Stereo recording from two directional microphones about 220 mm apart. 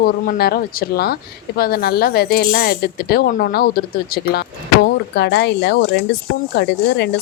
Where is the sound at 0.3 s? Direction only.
45° left (ahead or behind).